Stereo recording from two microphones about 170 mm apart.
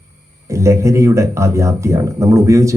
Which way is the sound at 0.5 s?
15° right (ahead or behind).